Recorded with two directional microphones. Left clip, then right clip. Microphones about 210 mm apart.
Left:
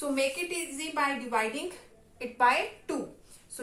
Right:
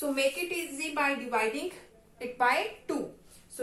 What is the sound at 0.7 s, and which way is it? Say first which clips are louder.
Speech: even; 25° left (ahead or behind).